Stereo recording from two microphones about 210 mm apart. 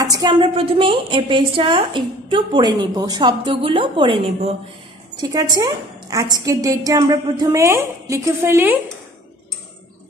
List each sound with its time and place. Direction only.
0.0 s a woman's voice: 20° right (ahead or behind)